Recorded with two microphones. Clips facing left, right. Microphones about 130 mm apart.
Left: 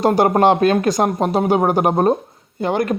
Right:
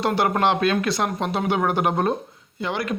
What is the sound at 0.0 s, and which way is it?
Speech, 40° left (ahead or behind).